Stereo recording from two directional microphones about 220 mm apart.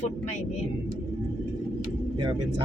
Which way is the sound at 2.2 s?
20° right (ahead or behind).